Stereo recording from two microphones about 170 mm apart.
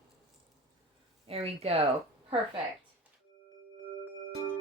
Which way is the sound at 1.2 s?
35° right (ahead or behind).